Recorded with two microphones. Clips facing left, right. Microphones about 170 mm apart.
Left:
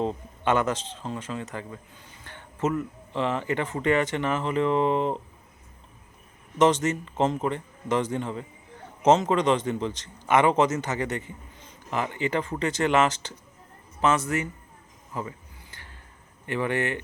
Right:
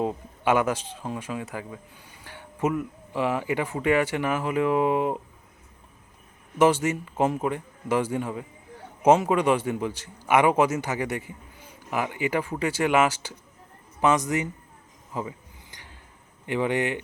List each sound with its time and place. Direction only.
0.0 s speech: 10° right (ahead or behind)
6.6 s speech: 10° right (ahead or behind)
15.1 s a sound: 15° right (ahead or behind)
16.5 s speech: 15° right (ahead or behind)